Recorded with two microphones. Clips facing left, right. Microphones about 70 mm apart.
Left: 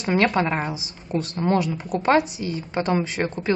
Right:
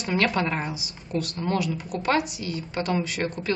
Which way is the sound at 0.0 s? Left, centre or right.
Left.